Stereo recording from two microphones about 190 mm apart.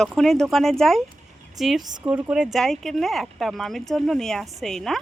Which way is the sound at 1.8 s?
20° right (ahead or behind).